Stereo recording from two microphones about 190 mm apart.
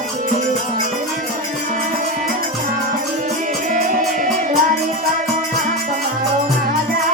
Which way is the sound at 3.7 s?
40° right (ahead or behind).